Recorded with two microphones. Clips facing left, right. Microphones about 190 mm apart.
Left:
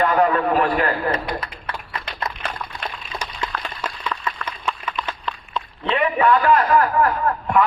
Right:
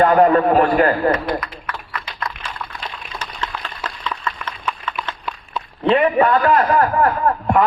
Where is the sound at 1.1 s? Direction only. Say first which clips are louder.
Right 4 dB; 30° left (ahead or behind).